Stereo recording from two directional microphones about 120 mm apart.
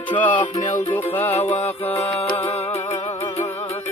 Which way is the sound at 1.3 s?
60° left (ahead or behind).